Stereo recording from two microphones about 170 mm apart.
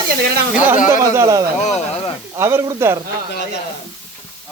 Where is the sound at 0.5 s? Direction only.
10° right (ahead or behind).